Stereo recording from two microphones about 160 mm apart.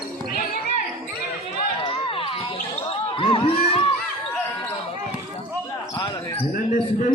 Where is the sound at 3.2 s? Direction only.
35° left (ahead or behind).